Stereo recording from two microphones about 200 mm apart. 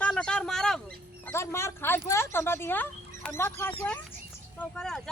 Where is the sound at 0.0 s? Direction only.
5° left (ahead or behind).